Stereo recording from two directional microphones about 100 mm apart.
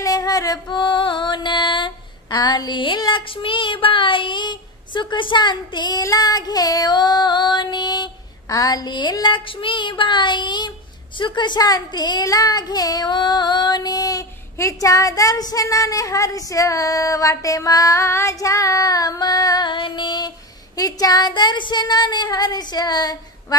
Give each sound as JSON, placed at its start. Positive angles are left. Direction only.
{"t": 0.0, "sound": "music", "side_deg": 35}
{"t": 3.1, "sound": "child singing", "side_deg": 55}
{"t": 6.1, "sound": "female singing", "side_deg": 40}
{"t": 9.1, "sound": "child singing", "side_deg": 50}
{"t": 11.1, "sound": "speech", "side_deg": 50}